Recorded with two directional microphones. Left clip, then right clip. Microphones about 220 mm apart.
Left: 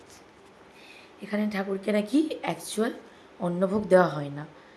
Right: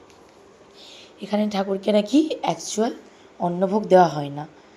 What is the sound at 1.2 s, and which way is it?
A woman's voice, 20° right (ahead or behind).